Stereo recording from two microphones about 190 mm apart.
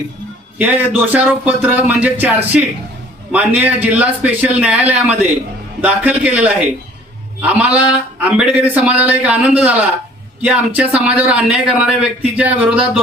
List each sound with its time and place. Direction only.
0.6 s a man's voice: 10° right (ahead or behind)